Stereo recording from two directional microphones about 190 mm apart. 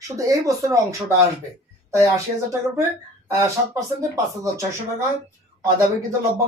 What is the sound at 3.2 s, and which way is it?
Speech, 15° right (ahead or behind).